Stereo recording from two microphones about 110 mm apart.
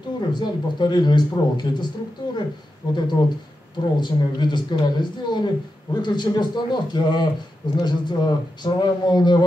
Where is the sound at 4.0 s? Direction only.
45° left (ahead or behind).